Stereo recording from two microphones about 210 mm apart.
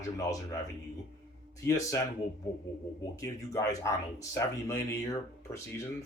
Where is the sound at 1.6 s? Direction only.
15° left (ahead or behind).